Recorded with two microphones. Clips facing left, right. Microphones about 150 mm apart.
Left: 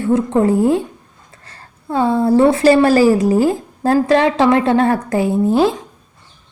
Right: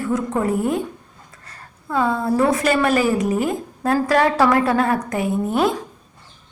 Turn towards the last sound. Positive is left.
turn(degrees=30)  # may be behind; listen again after turning